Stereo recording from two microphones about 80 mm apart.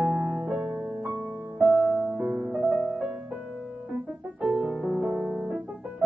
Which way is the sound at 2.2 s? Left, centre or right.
Right.